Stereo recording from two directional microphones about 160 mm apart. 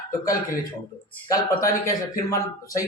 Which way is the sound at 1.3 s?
20° left (ahead or behind).